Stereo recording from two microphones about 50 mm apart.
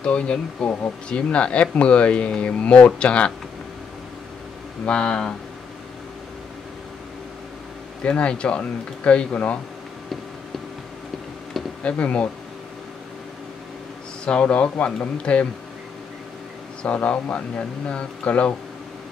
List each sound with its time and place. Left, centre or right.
0.0 s speech: left
4.8 s speech: centre
8.0 s speech: left
11.8 s speech: left
14.2 s speech: left
16.8 s speech: left